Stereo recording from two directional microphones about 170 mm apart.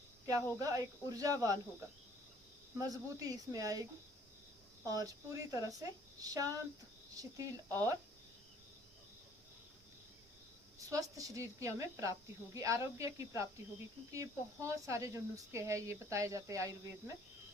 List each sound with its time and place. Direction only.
0.3 s speech: 20° right (ahead or behind)
2.7 s speech: 20° right (ahead or behind)
4.8 s a woman's voice: 20° right (ahead or behind)
10.8 s speech: 20° right (ahead or behind)